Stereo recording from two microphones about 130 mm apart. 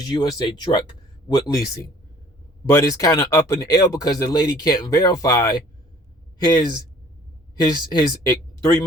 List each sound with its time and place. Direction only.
0.0 s speech: 30° left (ahead or behind)